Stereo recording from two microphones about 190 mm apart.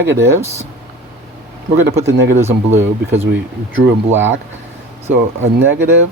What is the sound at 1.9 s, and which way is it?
Speech, 15° right (ahead or behind).